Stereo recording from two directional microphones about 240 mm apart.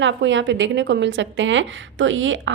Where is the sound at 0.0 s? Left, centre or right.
Right.